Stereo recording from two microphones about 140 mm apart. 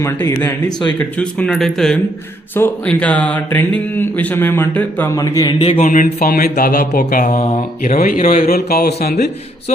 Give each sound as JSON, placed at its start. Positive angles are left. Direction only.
{"t": 0.0, "sound": "speech", "side_deg": 15}
{"t": 5.1, "sound": "a man's voice", "side_deg": 25}
{"t": 5.8, "sound": "mantra", "side_deg": 70}
{"t": 7.8, "sound": "speech", "side_deg": 90}